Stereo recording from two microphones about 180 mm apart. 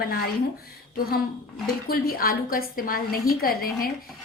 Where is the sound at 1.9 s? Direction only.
55° left (ahead or behind).